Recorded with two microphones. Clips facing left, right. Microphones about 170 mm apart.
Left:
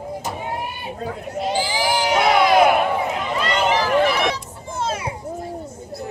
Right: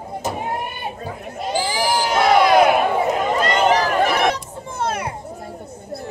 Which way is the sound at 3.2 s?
45° right (ahead or behind).